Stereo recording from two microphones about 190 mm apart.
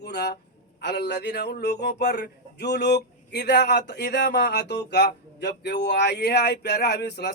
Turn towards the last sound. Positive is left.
turn(degrees=60)  # may be behind; listen again after turning